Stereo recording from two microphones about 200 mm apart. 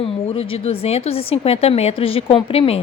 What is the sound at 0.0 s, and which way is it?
A woman's voice, 25° left (ahead or behind).